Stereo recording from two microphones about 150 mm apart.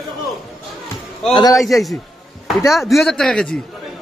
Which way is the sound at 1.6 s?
Centre (ahead or behind).